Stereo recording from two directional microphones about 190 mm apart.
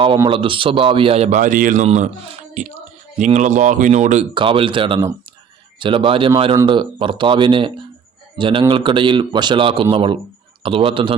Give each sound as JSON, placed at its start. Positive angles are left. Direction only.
{"t": 0.3, "sound": "speech", "side_deg": -25}
{"t": 4.4, "sound": "speech", "side_deg": -25}